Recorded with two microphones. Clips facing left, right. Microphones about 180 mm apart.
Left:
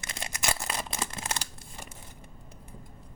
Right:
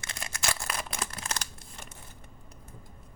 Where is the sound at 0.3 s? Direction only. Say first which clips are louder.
Left 1 dB; 20° left (ahead or behind).